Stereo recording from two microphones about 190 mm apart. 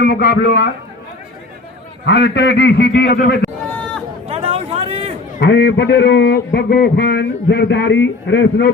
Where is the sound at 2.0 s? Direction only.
65° left (ahead or behind).